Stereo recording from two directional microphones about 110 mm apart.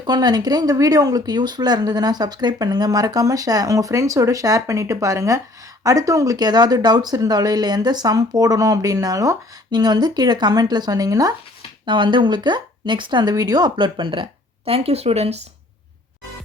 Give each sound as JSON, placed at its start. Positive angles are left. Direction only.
{"t": 0.0, "sound": "speech", "side_deg": -40}
{"t": 11.9, "sound": "speech", "side_deg": -45}